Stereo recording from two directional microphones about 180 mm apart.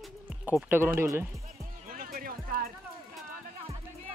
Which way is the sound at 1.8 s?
50° right (ahead or behind).